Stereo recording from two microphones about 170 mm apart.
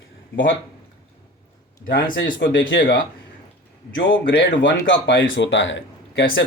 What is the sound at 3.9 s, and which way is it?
Speech, 90° left.